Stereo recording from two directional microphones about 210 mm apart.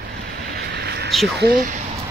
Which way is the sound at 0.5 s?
50° right (ahead or behind).